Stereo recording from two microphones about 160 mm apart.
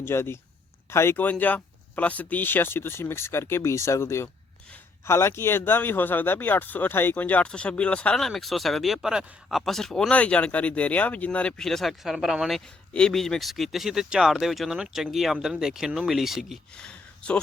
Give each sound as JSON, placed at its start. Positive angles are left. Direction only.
{"t": 0.0, "sound": "a man's voice", "side_deg": 15}